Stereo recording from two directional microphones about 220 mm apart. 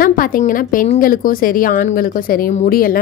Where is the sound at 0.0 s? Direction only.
40° left (ahead or behind).